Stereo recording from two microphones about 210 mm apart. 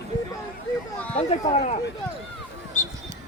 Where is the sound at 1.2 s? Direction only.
30° left (ahead or behind).